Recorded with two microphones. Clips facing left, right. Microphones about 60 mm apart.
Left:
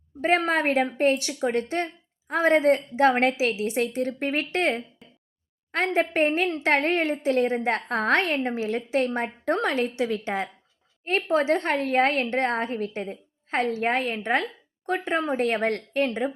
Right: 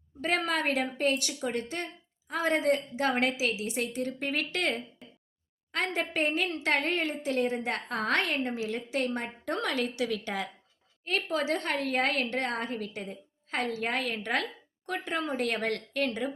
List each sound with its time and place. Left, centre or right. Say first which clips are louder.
0.2 s a woman's voice: left 7 dB; left
5.0 s a sound: right 1 dB; centre
5.7 s a woman's voice: left 7 dB; left